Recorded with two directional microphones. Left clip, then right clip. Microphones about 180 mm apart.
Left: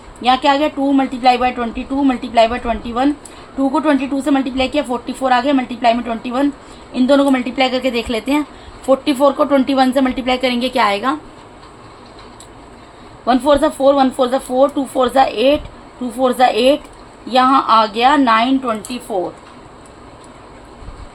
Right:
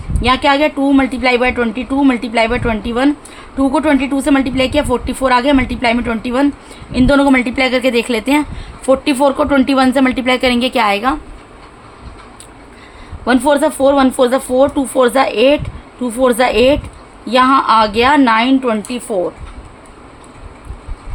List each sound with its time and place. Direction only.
0.2 s a woman's voice: 35° right (ahead or behind)
13.2 s a woman's voice: 40° right (ahead or behind)